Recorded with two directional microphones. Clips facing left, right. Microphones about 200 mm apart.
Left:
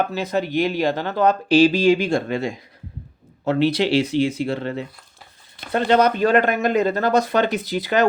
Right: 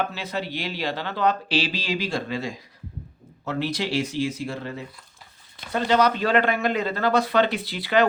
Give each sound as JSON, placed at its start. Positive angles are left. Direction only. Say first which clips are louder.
{"t": 0.0, "sound": "speech", "louder": "left 6 dB", "side_deg": 45}